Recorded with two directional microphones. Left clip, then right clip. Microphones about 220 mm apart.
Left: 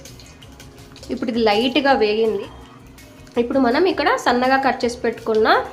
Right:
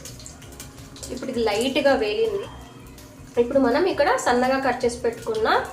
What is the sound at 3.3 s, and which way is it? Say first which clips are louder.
A woman's voice: left 2 dB; 35° left (ahead or behind).